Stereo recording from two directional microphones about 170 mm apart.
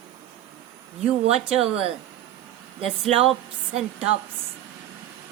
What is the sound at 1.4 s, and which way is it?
Speech, 5° right (ahead or behind).